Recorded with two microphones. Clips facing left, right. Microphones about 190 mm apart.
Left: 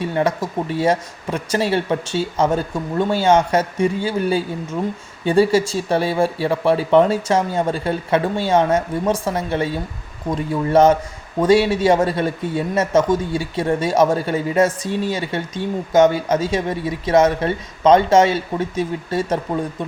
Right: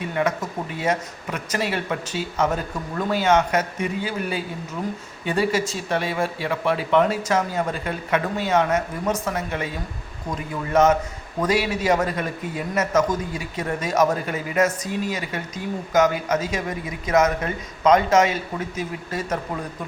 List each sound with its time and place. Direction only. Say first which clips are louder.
0.0 s speech: left 4 dB; 30° left (ahead or behind)